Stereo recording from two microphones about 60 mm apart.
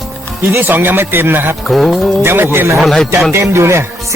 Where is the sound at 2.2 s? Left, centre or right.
Right.